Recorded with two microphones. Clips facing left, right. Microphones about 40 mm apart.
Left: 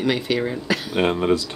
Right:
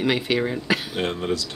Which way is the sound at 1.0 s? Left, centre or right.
Left.